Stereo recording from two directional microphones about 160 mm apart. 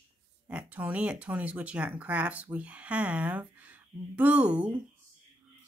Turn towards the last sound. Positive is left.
turn(degrees=-10)  # may be behind; listen again after turning